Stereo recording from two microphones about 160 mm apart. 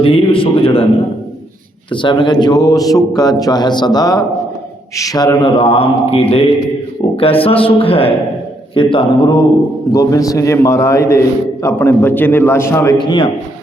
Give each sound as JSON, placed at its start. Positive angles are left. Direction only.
{"t": 0.0, "sound": "a man's voice", "side_deg": 35}
{"t": 1.9, "sound": "a man's voice", "side_deg": 30}